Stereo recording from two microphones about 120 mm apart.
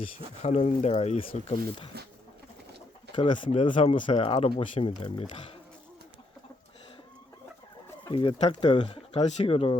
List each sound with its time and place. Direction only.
0.4 s speech: 65° left (ahead or behind)
3.2 s speech: 45° left (ahead or behind)
8.0 s speech: 45° left (ahead or behind)
8.4 s speech: 65° left (ahead or behind)